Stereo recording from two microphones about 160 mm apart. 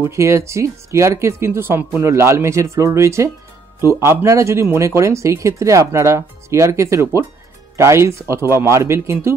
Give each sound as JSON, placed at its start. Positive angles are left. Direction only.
{"t": 0.0, "sound": "speech", "side_deg": -20}